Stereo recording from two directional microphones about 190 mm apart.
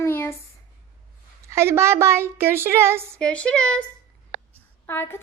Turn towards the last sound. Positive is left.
turn(degrees=10)  # may be behind; listen again after turning